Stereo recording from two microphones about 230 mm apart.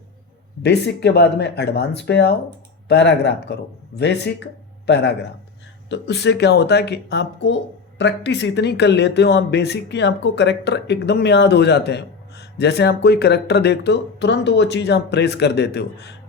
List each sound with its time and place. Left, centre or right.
0.6 s speech: left